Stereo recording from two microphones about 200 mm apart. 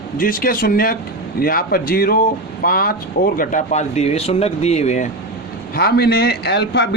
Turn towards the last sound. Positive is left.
turn(degrees=55)  # may be behind; listen again after turning